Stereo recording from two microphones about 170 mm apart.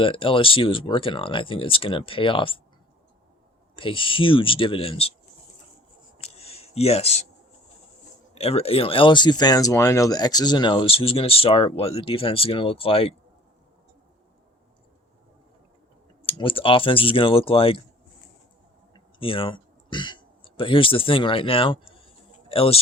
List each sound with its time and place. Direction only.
0.0 s speech: 30° left (ahead or behind)
3.8 s speech: 30° left (ahead or behind)
6.1 s a sound: 35° left (ahead or behind)
8.4 s speech: 35° left (ahead or behind)
16.2 s speech: 30° left (ahead or behind)
18.9 s speech: 30° left (ahead or behind)